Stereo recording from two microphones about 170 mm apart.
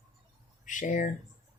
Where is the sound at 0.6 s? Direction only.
50° left (ahead or behind).